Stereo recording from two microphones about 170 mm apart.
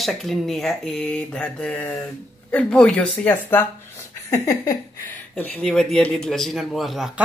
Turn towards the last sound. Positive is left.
turn(degrees=0)  # may be behind; listen again after turning